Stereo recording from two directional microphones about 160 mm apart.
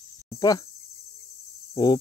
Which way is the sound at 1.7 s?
25° left (ahead or behind).